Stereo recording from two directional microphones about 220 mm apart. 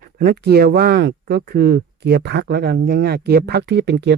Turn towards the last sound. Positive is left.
turn(degrees=-50)  # may be behind; listen again after turning